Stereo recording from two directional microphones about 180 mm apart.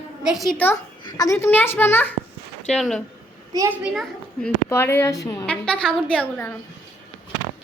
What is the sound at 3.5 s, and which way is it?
Speech, 20° right (ahead or behind).